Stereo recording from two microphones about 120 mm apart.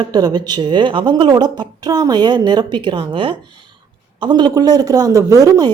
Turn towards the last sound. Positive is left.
turn(degrees=-30)  # may be behind; listen again after turning